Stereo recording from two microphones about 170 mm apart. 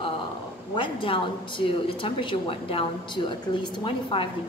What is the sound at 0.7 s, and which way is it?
A woman's voice, 30° left (ahead or behind).